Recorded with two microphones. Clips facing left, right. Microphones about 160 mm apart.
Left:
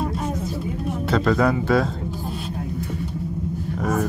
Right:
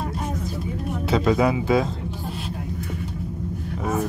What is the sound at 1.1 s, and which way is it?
Speech, 5° right (ahead or behind).